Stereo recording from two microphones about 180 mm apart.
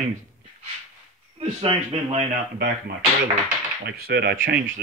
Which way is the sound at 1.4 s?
35° right (ahead or behind).